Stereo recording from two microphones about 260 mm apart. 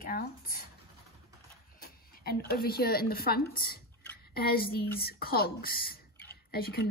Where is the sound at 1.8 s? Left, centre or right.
Left.